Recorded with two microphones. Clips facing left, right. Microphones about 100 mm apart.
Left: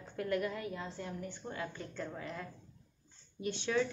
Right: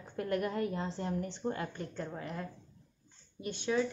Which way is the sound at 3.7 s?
20° right (ahead or behind).